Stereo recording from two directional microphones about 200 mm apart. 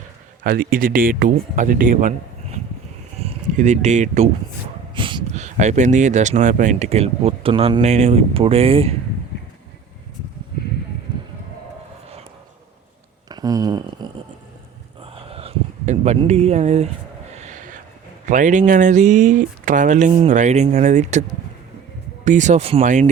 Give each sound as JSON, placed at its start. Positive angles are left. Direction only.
{"t": 0.4, "sound": "speech", "side_deg": -45}
{"t": 4.9, "sound": "speech", "side_deg": -25}
{"t": 13.2, "sound": "a sound", "side_deg": -20}
{"t": 18.3, "sound": "speech", "side_deg": -40}